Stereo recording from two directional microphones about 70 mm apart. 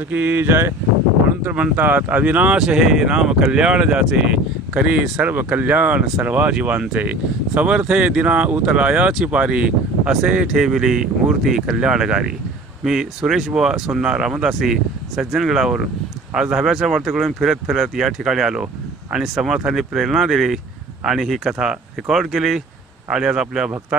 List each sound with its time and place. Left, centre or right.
0.1 s speech: right
1.4 s speech: right
2.5 s speech: centre
5.2 s speech: right; by 23.7 s centre